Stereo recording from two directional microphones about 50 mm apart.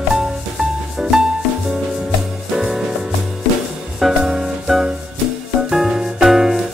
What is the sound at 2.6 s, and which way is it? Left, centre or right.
Music, centre.